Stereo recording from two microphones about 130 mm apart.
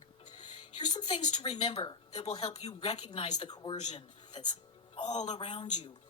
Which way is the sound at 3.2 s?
35° left (ahead or behind).